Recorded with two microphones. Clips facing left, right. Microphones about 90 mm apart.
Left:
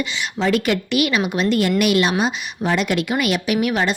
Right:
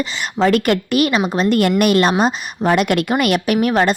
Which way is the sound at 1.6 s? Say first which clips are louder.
Right 4 dB; 50° right (ahead or behind).